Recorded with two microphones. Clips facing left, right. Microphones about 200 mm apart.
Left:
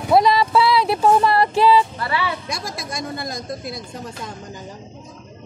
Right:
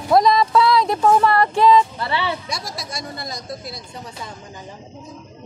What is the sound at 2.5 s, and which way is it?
Speech, 50° left (ahead or behind).